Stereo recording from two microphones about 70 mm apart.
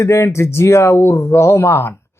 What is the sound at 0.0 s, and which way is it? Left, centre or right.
Speech, left.